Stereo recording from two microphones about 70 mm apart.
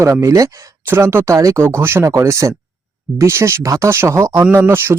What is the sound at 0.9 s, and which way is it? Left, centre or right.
Speech, right.